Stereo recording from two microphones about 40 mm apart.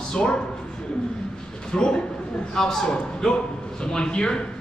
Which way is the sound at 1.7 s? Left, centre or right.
Left.